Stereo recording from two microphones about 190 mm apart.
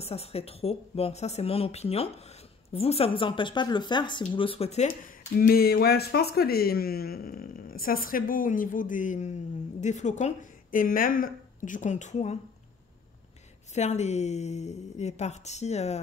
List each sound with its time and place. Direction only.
0.0 s a woman's voice: 30° left (ahead or behind)
5.4 s speech: 55° left (ahead or behind); by 12.4 s 35° left (ahead or behind)
13.7 s a woman's voice: 35° left (ahead or behind)